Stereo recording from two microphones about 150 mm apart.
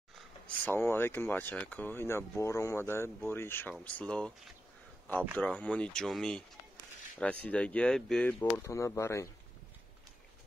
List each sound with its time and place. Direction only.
0.7 s speech: 15° left (ahead or behind)
5.4 s speech: 10° left (ahead or behind)
8.6 s speech: 20° left (ahead or behind)